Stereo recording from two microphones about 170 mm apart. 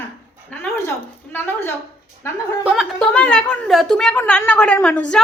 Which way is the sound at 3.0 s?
5° left (ahead or behind).